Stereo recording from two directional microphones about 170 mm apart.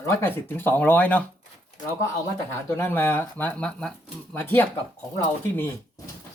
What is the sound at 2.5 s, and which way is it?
Speech, 15° left (ahead or behind).